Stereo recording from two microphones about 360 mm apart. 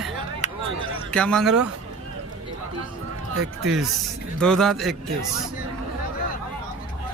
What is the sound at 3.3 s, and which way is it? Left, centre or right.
Speech, right.